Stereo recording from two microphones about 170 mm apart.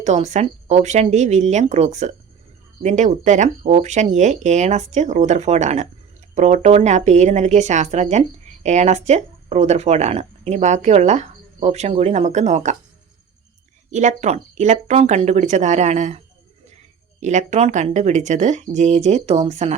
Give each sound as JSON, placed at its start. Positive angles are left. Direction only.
{"t": 0.0, "sound": "speech", "side_deg": -45}
{"t": 13.9, "sound": "speech", "side_deg": -45}